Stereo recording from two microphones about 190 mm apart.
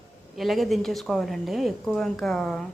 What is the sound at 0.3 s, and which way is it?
A woman's voice, centre (ahead or behind).